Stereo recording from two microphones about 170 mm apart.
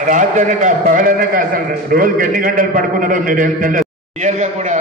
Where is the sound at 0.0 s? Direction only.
50° right (ahead or behind).